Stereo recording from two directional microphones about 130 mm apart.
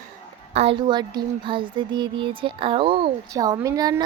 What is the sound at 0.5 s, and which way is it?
Speech, 50° right (ahead or behind).